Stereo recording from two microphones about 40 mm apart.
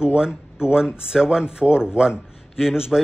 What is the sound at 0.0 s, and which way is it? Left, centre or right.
Speech, centre.